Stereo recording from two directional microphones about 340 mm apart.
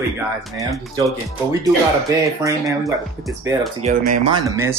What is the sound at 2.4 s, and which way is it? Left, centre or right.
Speech, centre.